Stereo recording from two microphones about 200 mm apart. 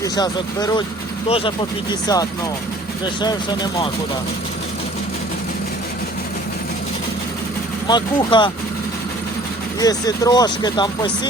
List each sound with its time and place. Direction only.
0.0 s speech: 20° left (ahead or behind)
7.9 s speech: 20° left (ahead or behind)
9.8 s speech: 20° left (ahead or behind)